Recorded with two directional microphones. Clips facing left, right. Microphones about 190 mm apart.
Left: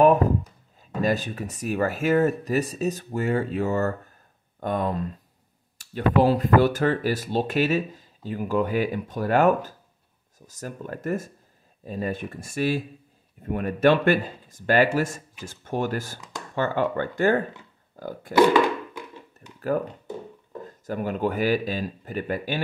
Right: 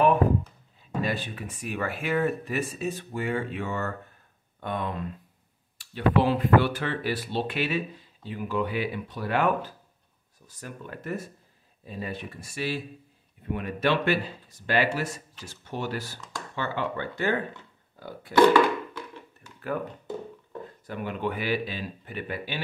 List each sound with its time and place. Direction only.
0.7 s speech: 40° left (ahead or behind)
18.3 s a sound: 15° left (ahead or behind)
19.7 s speech: 40° left (ahead or behind)